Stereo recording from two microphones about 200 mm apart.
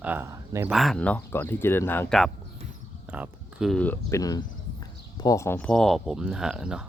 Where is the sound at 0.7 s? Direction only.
Centre (ahead or behind).